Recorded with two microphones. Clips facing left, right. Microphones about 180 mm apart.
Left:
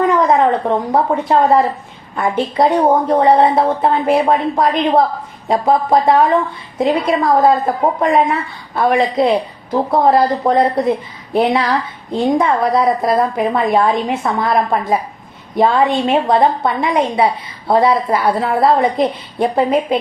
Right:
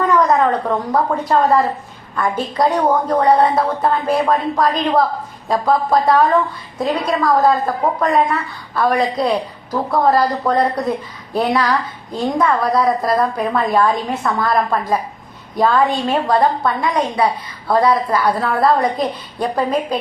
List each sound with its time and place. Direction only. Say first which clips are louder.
0.1 s a woman's voice: left 2 dB; 25° left (ahead or behind)